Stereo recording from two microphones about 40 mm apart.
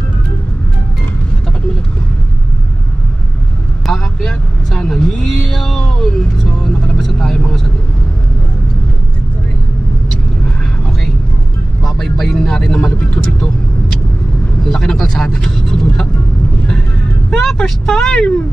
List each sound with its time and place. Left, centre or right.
4.2 s vehicle: centre
11.8 s vehicle: centre
14.6 s vehicle: centre
17.3 s vehicle: centre